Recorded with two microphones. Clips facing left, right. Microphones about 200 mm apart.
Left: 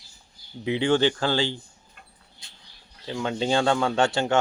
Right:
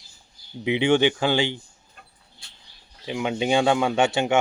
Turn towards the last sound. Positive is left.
turn(degrees=-15)  # may be behind; listen again after turning